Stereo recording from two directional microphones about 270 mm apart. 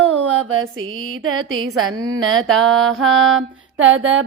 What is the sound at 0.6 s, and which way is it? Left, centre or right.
Mantra, right.